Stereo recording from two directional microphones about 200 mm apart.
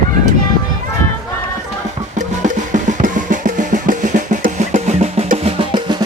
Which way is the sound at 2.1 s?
40° right (ahead or behind).